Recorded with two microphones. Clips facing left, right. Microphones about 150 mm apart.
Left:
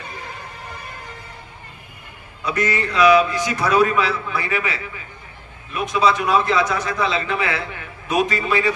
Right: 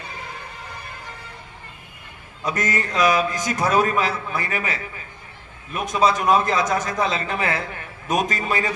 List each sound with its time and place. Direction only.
2.4 s a man's voice: 45° right (ahead or behind)